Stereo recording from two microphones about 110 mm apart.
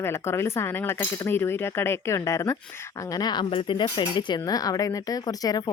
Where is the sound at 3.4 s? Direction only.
55° left (ahead or behind).